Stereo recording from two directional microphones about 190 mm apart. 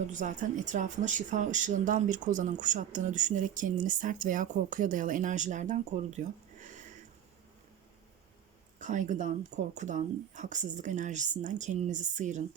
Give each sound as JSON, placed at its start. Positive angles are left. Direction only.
{"t": 0.1, "sound": "speech", "side_deg": -40}
{"t": 8.8, "sound": "speech", "side_deg": -40}